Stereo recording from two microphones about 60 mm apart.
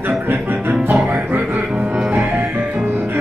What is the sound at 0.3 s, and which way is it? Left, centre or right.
Music, right.